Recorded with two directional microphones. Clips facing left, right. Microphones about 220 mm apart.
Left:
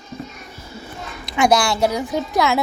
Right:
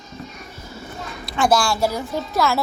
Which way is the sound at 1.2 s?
15° left (ahead or behind).